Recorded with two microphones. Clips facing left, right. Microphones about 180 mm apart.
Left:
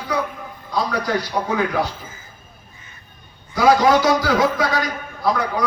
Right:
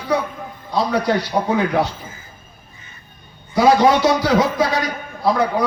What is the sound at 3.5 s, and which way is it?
A man's voice, 25° right (ahead or behind).